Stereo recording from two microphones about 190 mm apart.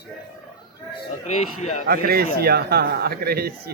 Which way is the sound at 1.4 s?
35° left (ahead or behind).